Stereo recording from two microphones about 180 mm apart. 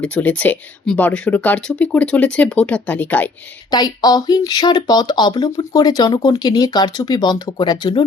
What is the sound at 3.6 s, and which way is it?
Speech, 20° left (ahead or behind).